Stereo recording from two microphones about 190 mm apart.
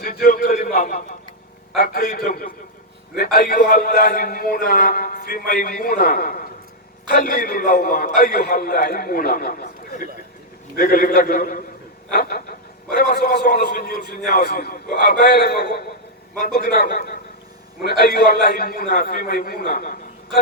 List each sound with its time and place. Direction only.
0.0 s a man's voice: 50° left (ahead or behind)